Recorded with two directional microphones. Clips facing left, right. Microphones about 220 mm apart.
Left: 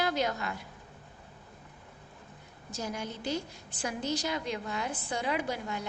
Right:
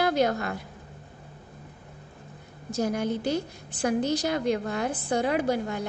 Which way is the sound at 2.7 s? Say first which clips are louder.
Right 10 dB; 55° right (ahead or behind).